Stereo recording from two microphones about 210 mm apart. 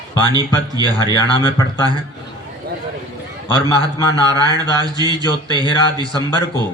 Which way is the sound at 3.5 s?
20° right (ahead or behind).